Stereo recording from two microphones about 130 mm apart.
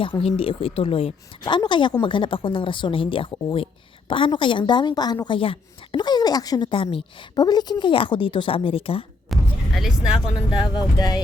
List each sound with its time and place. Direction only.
0.0 s speech: 45° left (ahead or behind)
9.3 s vehicle: centre (ahead or behind)
10.3 s speech: 30° left (ahead or behind)